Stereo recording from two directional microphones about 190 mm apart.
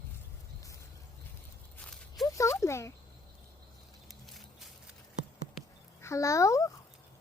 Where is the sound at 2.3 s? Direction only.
15° left (ahead or behind).